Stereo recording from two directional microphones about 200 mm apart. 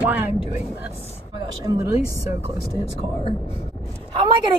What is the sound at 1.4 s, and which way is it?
Speech, 20° right (ahead or behind).